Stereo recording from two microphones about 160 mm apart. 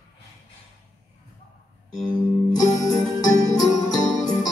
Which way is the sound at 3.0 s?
5° left (ahead or behind).